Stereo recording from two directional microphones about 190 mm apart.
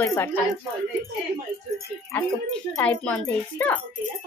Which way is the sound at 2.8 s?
10° left (ahead or behind).